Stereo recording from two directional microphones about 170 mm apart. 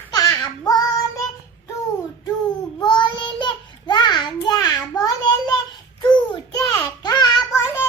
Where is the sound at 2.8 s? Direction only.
25° left (ahead or behind).